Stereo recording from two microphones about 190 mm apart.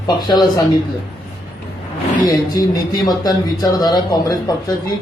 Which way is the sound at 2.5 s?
20° left (ahead or behind).